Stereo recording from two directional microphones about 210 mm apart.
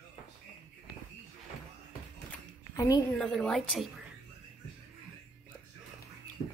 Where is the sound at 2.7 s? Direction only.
15° left (ahead or behind).